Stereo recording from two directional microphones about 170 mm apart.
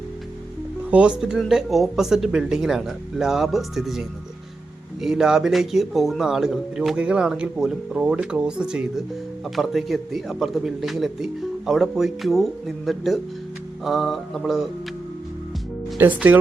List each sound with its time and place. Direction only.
0.9 s speech: 5° right (ahead or behind)
16.0 s speech: 10° right (ahead or behind)